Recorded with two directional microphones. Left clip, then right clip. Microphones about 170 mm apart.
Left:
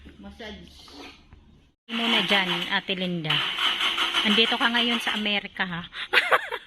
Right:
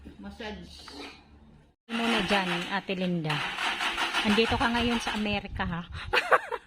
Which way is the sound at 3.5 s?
90° right.